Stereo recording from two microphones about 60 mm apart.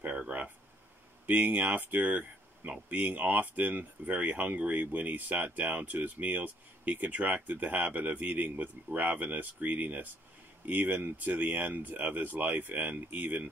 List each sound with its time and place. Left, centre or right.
0.3 s speech: right